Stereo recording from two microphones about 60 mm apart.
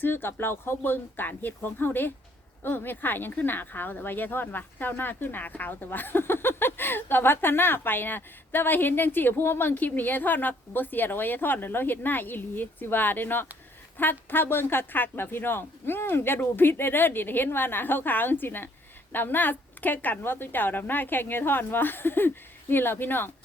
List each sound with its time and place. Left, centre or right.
0.0 s speech: left